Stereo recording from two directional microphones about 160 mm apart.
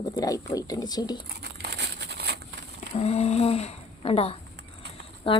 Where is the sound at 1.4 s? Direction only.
90° right.